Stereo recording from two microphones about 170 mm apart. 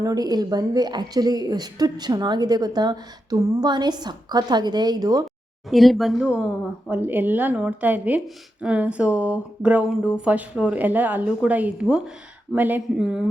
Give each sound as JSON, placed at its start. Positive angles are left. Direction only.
{"t": 0.0, "sound": "speech", "side_deg": -20}
{"t": 5.7, "sound": "a woman's voice", "side_deg": 0}